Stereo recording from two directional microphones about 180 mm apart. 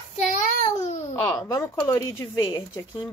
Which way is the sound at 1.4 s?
20° left (ahead or behind).